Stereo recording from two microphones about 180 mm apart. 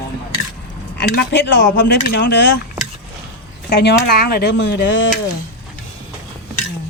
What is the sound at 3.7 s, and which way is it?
A woman's voice, 65° left (ahead or behind).